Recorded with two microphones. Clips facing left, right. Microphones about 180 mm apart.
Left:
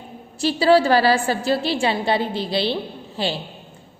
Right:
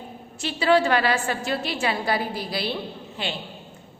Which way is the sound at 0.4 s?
35° left (ahead or behind).